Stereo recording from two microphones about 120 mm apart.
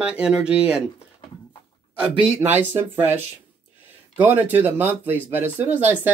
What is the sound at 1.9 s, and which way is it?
Speech, 10° right (ahead or behind).